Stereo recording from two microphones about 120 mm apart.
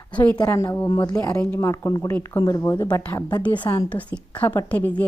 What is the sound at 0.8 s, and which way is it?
A woman's voice, 30° left (ahead or behind).